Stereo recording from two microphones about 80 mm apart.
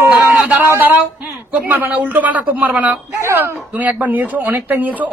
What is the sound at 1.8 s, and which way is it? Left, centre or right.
Speech, centre.